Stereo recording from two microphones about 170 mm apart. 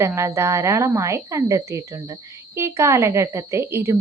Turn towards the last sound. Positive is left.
turn(degrees=-15)  # may be behind; listen again after turning